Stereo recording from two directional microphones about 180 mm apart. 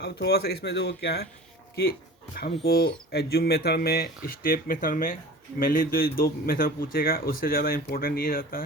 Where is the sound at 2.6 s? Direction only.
60° left (ahead or behind).